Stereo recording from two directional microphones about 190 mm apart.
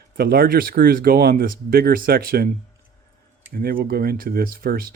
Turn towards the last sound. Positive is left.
turn(degrees=-50)  # may be behind; listen again after turning